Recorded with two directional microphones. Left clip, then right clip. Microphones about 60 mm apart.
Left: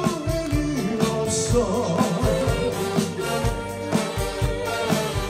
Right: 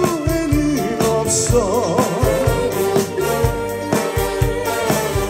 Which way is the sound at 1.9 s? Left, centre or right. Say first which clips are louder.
Right 6 dB; right.